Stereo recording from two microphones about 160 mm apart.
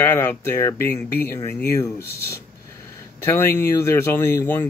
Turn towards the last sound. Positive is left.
turn(degrees=15)  # may be behind; listen again after turning